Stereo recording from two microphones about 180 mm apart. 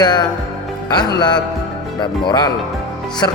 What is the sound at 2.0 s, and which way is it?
Speech, 25° left (ahead or behind).